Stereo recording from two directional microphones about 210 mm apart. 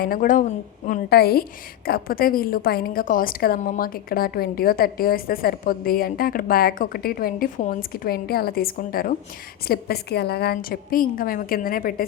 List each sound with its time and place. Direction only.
0.0 s a woman's voice: 45° left (ahead or behind)